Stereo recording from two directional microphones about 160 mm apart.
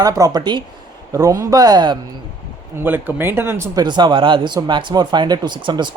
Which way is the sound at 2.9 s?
15° right (ahead or behind).